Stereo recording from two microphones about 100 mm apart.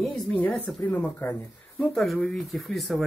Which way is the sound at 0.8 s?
15° left (ahead or behind).